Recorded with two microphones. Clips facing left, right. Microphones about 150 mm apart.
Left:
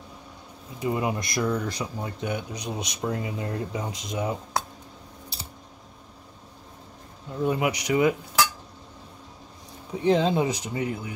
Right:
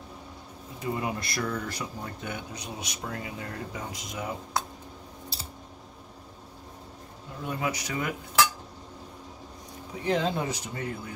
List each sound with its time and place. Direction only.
0.7 s speech: 20° left (ahead or behind)
7.4 s speech: 15° left (ahead or behind)
10.0 s speech: 20° left (ahead or behind)